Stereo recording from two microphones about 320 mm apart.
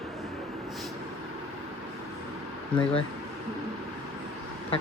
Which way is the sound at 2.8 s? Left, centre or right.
Centre.